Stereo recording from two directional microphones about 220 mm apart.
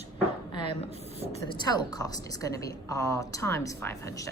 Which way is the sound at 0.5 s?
20° left (ahead or behind).